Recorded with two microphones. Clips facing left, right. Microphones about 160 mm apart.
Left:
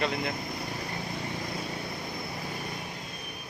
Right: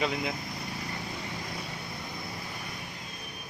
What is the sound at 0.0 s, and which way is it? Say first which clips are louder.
Speech: even; 5° right (ahead or behind).